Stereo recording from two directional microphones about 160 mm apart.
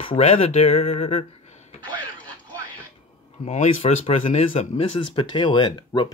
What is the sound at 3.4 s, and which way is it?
Speech, 45° left (ahead or behind).